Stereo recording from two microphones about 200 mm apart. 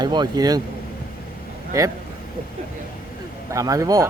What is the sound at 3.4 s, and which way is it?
Speech, 15° right (ahead or behind).